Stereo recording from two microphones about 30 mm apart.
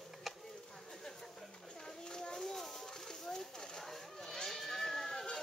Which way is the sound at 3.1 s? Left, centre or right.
Centre.